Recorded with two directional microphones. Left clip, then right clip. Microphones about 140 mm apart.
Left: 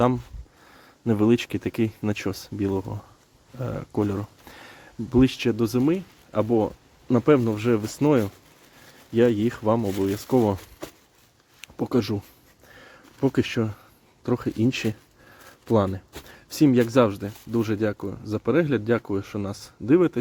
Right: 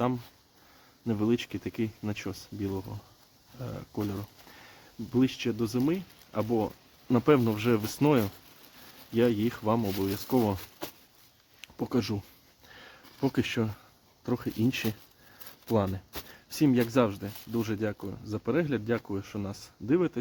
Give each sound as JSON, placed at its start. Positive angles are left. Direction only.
{"t": 1.0, "sound": "speech", "side_deg": 45}
{"t": 7.1, "sound": "speech", "side_deg": 10}
{"t": 9.1, "sound": "speech", "side_deg": 20}
{"t": 9.9, "sound": "speech", "side_deg": 5}
{"t": 11.6, "sound": "speech", "side_deg": 25}
{"t": 12.7, "sound": "a sound", "side_deg": 15}
{"t": 14.3, "sound": "speech", "side_deg": 25}